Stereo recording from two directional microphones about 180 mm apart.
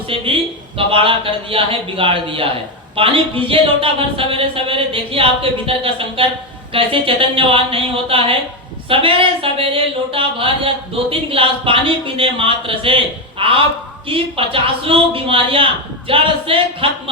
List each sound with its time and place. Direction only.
0.1 s a man's voice: 30° right (ahead or behind)